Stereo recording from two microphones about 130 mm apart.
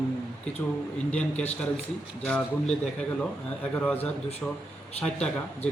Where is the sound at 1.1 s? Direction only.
10° left (ahead or behind).